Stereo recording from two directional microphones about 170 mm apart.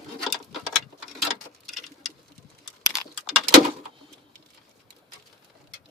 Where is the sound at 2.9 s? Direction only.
Centre (ahead or behind).